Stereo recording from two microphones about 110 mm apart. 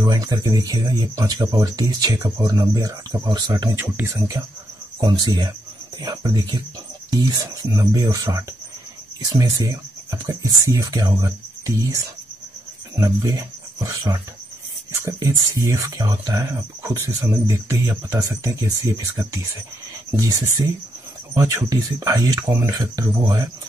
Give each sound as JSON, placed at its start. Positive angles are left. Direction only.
{"t": 0.0, "sound": "speech", "side_deg": -35}
{"t": 3.7, "sound": "speech", "side_deg": -20}
{"t": 5.0, "sound": "speech", "side_deg": -40}
{"t": 21.4, "sound": "speech", "side_deg": -30}